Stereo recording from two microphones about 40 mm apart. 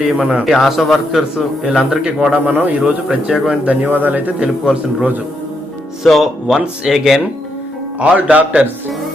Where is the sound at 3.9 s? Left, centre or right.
Right.